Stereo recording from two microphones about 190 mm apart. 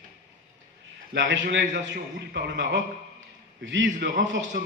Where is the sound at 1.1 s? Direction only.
70° right (ahead or behind).